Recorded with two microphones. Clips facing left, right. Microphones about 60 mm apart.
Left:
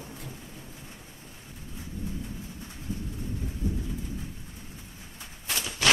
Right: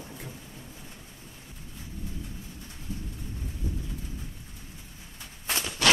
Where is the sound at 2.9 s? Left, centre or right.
Left.